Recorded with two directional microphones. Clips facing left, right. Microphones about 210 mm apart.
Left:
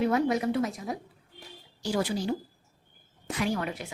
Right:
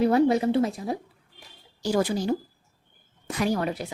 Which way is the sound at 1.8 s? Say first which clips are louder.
Right 4 dB; 45° right (ahead or behind).